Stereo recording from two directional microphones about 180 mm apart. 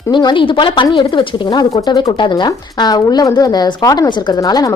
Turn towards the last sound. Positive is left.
turn(degrees=20)  # may be behind; listen again after turning